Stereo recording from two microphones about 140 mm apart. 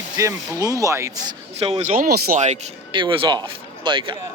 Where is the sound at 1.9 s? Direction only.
90° right.